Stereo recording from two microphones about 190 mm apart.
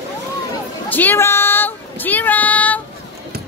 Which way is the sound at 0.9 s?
10° left (ahead or behind).